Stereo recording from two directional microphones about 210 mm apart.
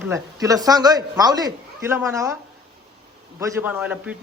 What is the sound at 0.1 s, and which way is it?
A man's voice, 15° right (ahead or behind).